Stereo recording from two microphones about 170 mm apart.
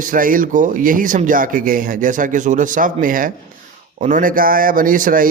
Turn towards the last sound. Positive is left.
turn(degrees=-55)  # may be behind; listen again after turning